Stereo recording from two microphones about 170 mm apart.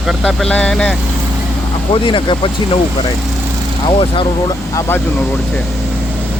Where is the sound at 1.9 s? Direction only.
30° left (ahead or behind).